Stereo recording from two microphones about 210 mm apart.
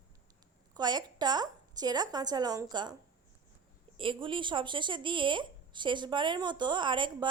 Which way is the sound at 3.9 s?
25° right (ahead or behind).